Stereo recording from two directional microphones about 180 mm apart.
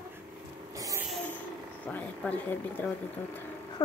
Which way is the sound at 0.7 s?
20° right (ahead or behind).